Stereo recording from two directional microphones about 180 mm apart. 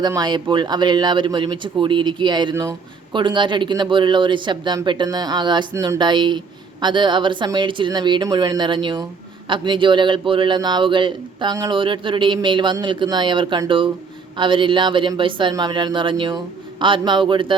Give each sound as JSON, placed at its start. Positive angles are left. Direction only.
{"t": 0.0, "sound": "speech", "side_deg": -25}